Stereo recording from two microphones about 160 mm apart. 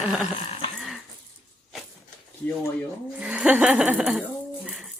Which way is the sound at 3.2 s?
5° right (ahead or behind).